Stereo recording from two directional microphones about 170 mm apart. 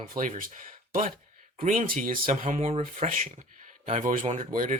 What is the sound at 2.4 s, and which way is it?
Speech, 40° right (ahead or behind).